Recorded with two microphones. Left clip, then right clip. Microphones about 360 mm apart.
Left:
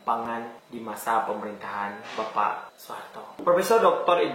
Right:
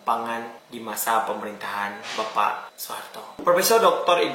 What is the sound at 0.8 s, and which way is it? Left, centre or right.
Speech, centre.